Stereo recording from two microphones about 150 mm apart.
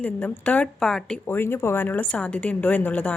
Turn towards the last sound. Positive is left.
turn(degrees=10)  # may be behind; listen again after turning